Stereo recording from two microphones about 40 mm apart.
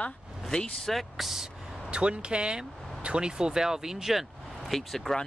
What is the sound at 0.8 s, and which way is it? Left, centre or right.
Speech, centre.